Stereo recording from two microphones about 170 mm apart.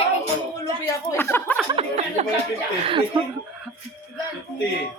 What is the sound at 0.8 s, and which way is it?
Chuckle, 15° left (ahead or behind).